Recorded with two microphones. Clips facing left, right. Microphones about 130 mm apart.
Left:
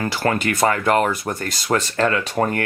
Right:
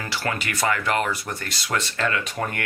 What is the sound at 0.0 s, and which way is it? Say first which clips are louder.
Speech: left 7 dB; 45° left (ahead or behind).